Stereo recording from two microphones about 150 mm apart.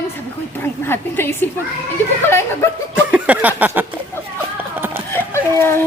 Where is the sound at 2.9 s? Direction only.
10° right (ahead or behind).